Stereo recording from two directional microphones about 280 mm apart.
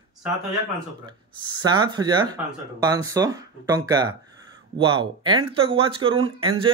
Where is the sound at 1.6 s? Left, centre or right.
Centre.